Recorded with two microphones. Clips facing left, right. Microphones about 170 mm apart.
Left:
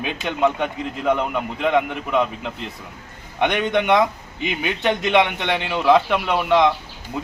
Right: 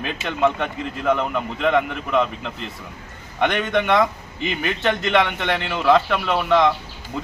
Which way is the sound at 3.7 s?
15° left (ahead or behind).